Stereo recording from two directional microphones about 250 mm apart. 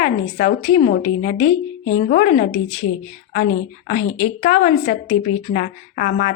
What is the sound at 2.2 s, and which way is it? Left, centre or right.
Speech, left.